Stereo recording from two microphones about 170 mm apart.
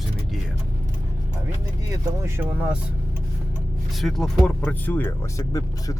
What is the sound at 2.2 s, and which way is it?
Speech, 15° right (ahead or behind).